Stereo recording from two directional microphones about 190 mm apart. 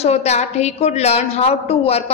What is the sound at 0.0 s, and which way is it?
A woman's voice, 35° left (ahead or behind).